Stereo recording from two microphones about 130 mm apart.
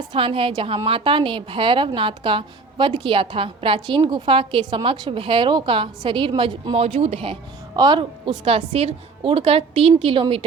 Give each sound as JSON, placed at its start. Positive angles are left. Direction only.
{"t": 0.1, "sound": "a woman's voice", "side_deg": -45}
{"t": 6.7, "sound": "a woman's voice", "side_deg": -50}
{"t": 7.8, "sound": "a woman's voice", "side_deg": -35}